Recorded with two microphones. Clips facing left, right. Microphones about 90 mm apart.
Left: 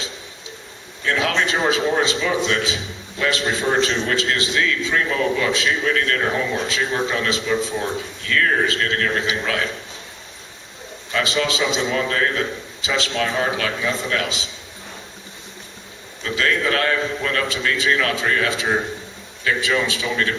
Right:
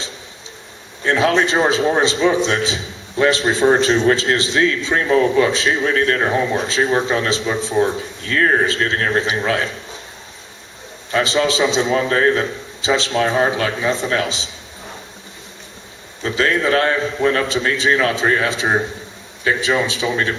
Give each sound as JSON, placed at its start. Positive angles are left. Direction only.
{"t": 1.0, "sound": "a man's voice", "side_deg": -30}
{"t": 11.1, "sound": "a man's voice", "side_deg": -35}
{"t": 16.2, "sound": "a man's voice", "side_deg": -30}